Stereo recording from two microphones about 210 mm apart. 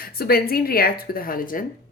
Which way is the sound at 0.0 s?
45° left (ahead or behind).